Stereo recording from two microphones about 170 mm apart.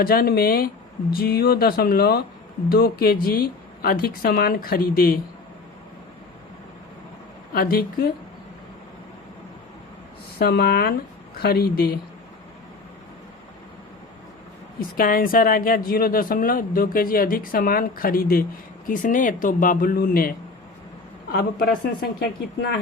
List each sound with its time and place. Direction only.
0.0 s speech: 60° left (ahead or behind)
7.5 s speech: 60° left (ahead or behind)
10.3 s speech: 65° left (ahead or behind)
14.8 s speech: 55° left (ahead or behind)
21.3 s speech: 60° left (ahead or behind)